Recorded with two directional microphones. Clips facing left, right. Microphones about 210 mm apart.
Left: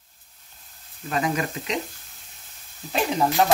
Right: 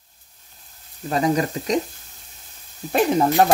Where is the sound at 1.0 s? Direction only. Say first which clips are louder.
Right 5 dB; 35° right (ahead or behind).